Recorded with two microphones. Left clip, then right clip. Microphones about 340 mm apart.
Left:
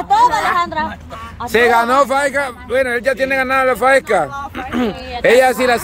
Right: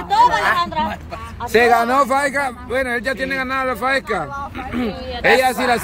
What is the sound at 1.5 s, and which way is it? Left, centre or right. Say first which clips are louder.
A man's voice: left 2 dB; centre.